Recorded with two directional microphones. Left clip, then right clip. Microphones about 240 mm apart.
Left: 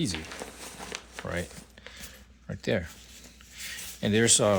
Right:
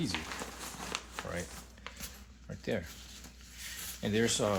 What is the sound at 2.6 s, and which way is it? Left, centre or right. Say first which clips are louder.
Speech: left 7 dB; left.